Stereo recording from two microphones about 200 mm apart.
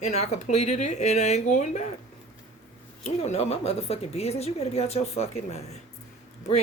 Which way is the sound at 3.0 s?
30° left (ahead or behind).